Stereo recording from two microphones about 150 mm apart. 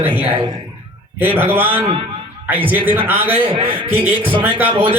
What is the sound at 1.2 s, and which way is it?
A man's voice, 15° right (ahead or behind).